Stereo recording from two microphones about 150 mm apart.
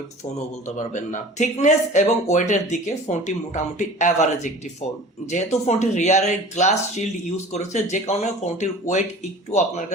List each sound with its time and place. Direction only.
0.8 s speech: 55° left (ahead or behind)